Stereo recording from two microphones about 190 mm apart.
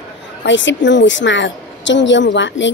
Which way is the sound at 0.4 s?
75° left (ahead or behind).